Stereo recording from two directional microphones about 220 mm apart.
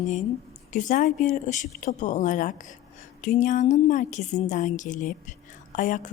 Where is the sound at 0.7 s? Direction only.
35° left (ahead or behind).